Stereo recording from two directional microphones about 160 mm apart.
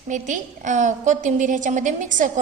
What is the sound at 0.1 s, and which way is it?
A woman's voice, 55° right (ahead or behind).